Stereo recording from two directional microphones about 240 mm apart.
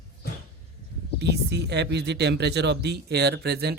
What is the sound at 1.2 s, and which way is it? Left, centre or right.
Speech, right.